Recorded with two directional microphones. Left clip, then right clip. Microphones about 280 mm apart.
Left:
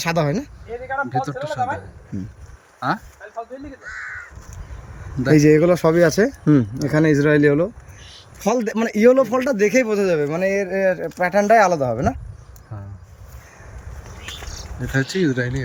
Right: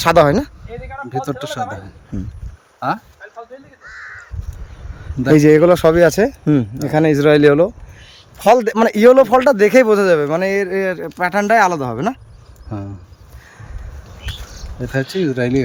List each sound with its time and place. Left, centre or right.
0.0 s speech: centre
1.1 s speech: right
2.1 s speech: centre
3.8 s crow: centre
5.3 s speech: centre
14.8 s speech: centre